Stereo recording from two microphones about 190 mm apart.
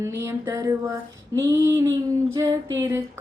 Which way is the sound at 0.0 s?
15° right (ahead or behind).